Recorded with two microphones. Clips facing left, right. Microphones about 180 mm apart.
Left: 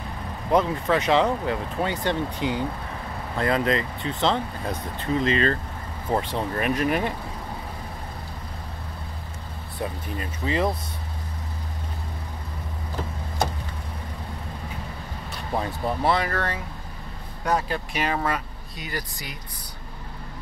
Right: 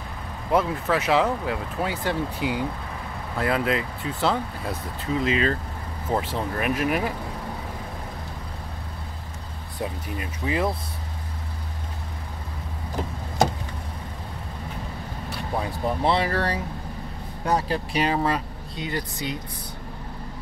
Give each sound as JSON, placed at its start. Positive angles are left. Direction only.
{"t": 0.5, "sound": "speech", "side_deg": -5}
{"t": 9.8, "sound": "speech", "side_deg": -10}
{"t": 16.0, "sound": "speech", "side_deg": -30}